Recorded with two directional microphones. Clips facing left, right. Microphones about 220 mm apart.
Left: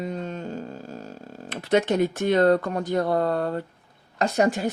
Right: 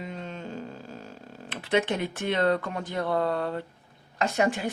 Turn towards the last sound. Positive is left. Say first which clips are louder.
# left 4 dB
turn(degrees=40)  # may be behind; listen again after turning